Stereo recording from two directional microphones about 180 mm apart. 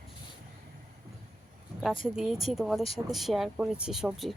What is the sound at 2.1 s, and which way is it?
Speech, centre (ahead or behind).